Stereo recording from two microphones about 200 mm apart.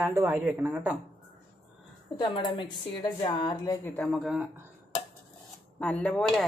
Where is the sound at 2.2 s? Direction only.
25° left (ahead or behind); by 4.2 s 5° left (ahead or behind).